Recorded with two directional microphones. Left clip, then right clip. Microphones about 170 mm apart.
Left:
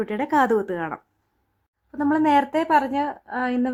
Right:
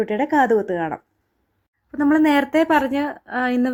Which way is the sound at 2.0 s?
10° right (ahead or behind).